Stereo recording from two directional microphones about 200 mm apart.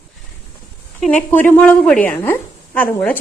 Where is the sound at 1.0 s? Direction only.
5° left (ahead or behind).